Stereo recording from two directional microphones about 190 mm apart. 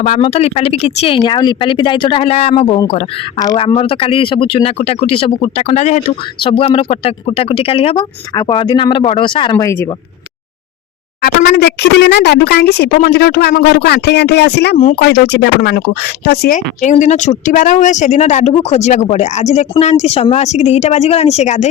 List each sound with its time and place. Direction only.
0.2 s speech: 30° left (ahead or behind); by 9.9 s 15° left (ahead or behind)
11.2 s speech: 55° left (ahead or behind)
16.6 s a woman's voice: 40° left (ahead or behind)